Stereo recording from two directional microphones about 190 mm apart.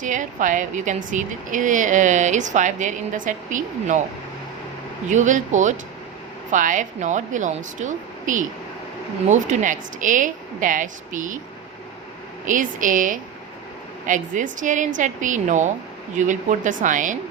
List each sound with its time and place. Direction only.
0.0 s a woman's voice: 40° right (ahead or behind)
5.0 s a woman's voice: 40° right (ahead or behind)
12.5 s a woman's voice: 45° right (ahead or behind)